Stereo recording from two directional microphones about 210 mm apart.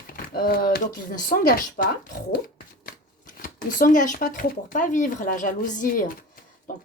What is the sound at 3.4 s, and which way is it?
A woman's voice, 40° left (ahead or behind).